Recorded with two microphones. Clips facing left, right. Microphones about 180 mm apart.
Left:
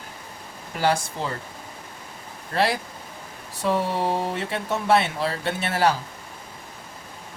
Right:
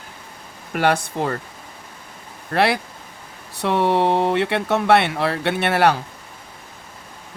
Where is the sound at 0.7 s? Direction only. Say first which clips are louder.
Right 4 dB; 60° right (ahead or behind).